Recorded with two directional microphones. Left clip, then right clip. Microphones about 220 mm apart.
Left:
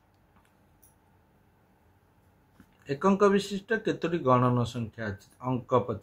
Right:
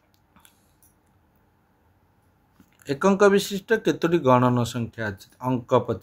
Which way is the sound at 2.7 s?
50° right (ahead or behind).